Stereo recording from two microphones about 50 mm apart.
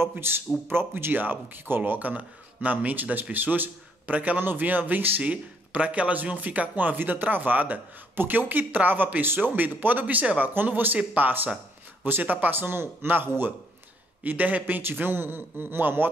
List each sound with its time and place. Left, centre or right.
0.2 s speech: right
1.1 s speech: right
5.2 s speech: right
14.8 s speech: right